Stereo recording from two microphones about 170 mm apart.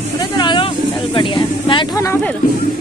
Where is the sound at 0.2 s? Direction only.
25° left (ahead or behind).